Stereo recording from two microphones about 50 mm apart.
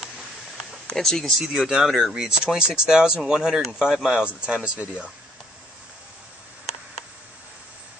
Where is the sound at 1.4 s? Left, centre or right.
Centre.